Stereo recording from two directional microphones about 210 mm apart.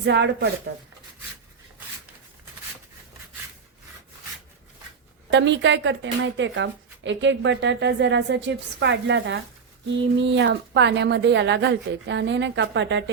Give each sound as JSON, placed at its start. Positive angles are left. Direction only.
{"t": 0.0, "sound": "speech", "side_deg": -55}
{"t": 5.3, "sound": "a woman's voice", "side_deg": -60}